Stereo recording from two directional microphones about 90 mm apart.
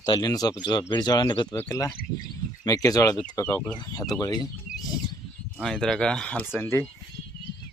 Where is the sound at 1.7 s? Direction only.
40° left (ahead or behind).